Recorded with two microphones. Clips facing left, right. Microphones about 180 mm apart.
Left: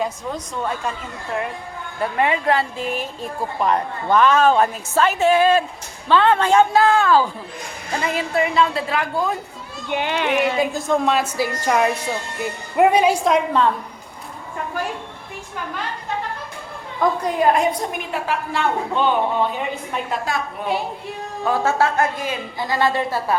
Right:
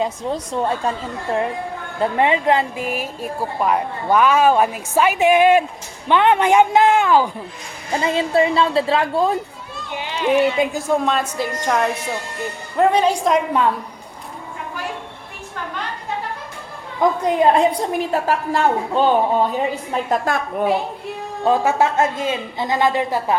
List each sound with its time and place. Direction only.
0.0 s a woman's voice: 30° right (ahead or behind)
2.0 s speech: 25° right (ahead or behind)
8.0 s a woman's voice: 25° right (ahead or behind)
9.9 s speech: 60° left (ahead or behind)
10.8 s speech: 10° right (ahead or behind)
11.0 s a woman's voice: 5° left (ahead or behind)
17.0 s a woman's voice: 20° right (ahead or behind); by 20.7 s 50° right (ahead or behind)
21.4 s a woman's voice: 15° right (ahead or behind)